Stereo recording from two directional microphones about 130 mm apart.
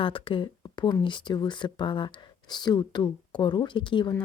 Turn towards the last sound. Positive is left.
turn(degrees=40)  # may be behind; listen again after turning